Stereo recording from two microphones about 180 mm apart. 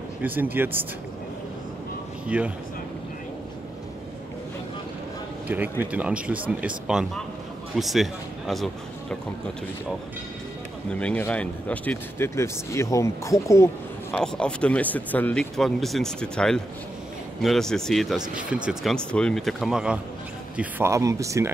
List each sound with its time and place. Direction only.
0.2 s speech: 10° right (ahead or behind)
2.2 s speech: 5° right (ahead or behind)
5.5 s speech: 10° right (ahead or behind)
10.9 s speech: 5° left (ahead or behind)
14.1 s speech: 5° left (ahead or behind); by 21.5 s 15° right (ahead or behind)